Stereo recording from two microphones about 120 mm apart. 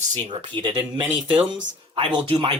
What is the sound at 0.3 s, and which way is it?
Speech, 40° right (ahead or behind).